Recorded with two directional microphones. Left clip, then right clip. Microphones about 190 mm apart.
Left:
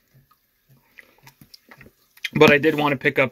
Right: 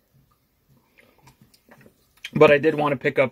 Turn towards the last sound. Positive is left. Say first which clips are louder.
# left 1 dB
turn(degrees=-5)  # may be behind; listen again after turning